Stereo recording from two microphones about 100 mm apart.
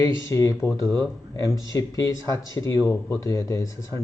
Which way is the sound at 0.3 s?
30° left (ahead or behind).